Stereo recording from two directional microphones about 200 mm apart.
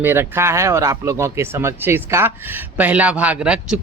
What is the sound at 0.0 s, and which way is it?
Speech, 10° right (ahead or behind).